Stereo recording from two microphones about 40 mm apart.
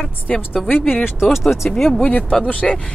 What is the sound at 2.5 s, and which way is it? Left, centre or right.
Speech, left.